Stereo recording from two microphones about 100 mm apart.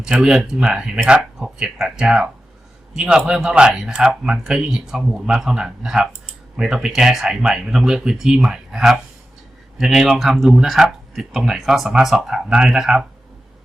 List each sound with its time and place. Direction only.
0.0 s speech: 5° right (ahead or behind)